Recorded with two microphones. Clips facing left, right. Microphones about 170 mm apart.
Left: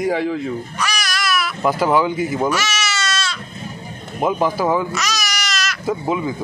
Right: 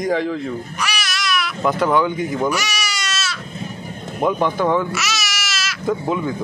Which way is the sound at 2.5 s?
15° right (ahead or behind).